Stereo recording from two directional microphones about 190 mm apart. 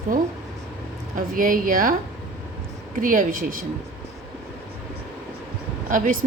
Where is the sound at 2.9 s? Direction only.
45° right (ahead or behind).